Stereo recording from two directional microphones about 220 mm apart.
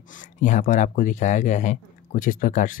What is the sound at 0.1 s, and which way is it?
Speech, 35° left (ahead or behind).